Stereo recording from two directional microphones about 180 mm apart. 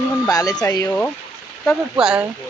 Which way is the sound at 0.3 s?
20° left (ahead or behind).